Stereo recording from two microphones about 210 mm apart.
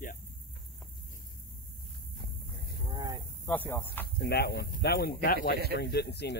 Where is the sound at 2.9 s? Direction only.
20° right (ahead or behind).